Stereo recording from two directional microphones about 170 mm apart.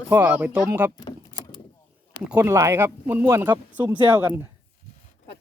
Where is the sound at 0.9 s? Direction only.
25° left (ahead or behind).